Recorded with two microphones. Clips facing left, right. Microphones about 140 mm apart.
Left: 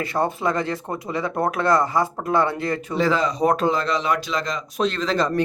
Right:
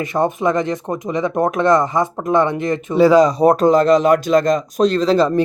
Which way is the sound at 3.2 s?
35° right (ahead or behind).